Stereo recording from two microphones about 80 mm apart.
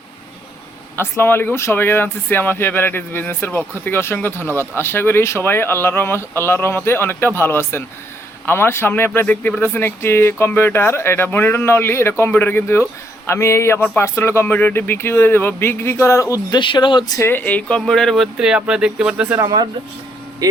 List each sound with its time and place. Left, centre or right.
0.9 s speech: left
16.5 s speech: left
17.2 s speech: left
17.4 s speech: centre
17.7 s speech: centre
18.3 s speech: centre